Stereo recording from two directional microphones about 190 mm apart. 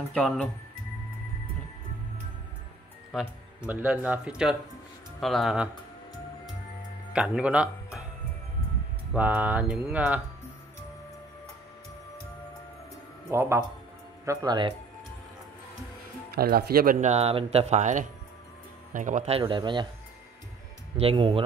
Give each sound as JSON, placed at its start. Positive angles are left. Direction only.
{"t": 0.1, "sound": "speech", "side_deg": 5}
{"t": 3.1, "sound": "speech", "side_deg": -5}
{"t": 7.1, "sound": "speech", "side_deg": -5}
{"t": 9.1, "sound": "speech", "side_deg": -10}
{"t": 13.3, "sound": "speech", "side_deg": -15}
{"t": 16.3, "sound": "speech", "side_deg": -55}
{"t": 21.0, "sound": "speech", "side_deg": -30}